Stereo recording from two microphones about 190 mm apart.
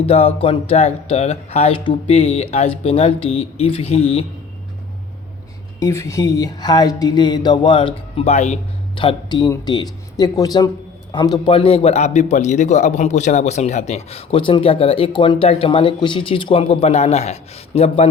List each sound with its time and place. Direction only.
0.0 s a man's voice: 30° left (ahead or behind)
5.8 s speech: 15° left (ahead or behind); by 8.5 s 35° left (ahead or behind)
9.0 s a man's voice: 25° left (ahead or behind)